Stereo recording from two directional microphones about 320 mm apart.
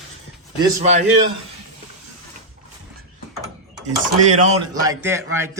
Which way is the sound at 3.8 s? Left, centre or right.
Right.